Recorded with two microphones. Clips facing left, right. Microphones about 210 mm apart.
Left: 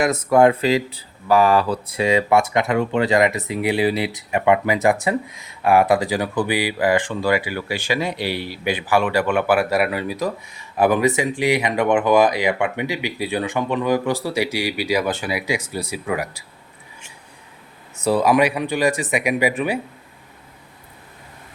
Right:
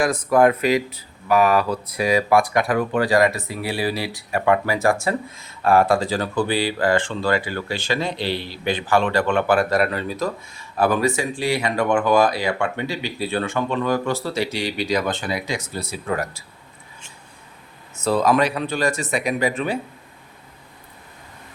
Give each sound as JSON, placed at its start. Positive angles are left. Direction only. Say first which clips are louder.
{"t": 0.0, "sound": "speech", "louder": "left 2 dB", "side_deg": 25}
{"t": 18.0, "sound": "speech", "louder": "left 2 dB", "side_deg": 15}